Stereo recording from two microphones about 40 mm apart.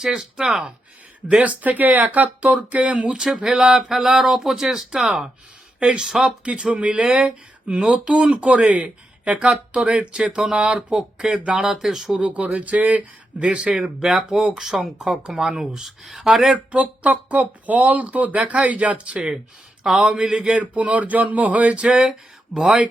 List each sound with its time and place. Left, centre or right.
0.0 s speech: right
1.4 s speech: right
3.1 s speech: centre
6.6 s speech: right
11.8 s speech: centre
12.2 s speech: right
13.7 s speech: centre
16.7 s speech: right
20.0 s speech: centre
20.4 s speech: right
22.5 s speech: centre